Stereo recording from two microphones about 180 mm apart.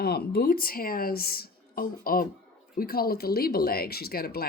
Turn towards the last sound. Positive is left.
turn(degrees=60)  # may be behind; listen again after turning